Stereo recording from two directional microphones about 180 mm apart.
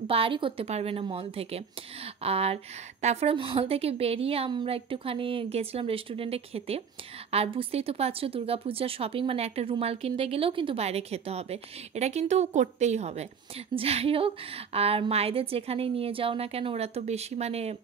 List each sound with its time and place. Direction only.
0.0 s a woman's voice: 30° right (ahead or behind)